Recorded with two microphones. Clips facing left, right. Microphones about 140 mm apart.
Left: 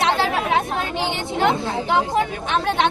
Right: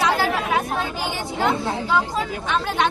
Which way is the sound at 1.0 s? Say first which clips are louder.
Left 3 dB; 25° left (ahead or behind).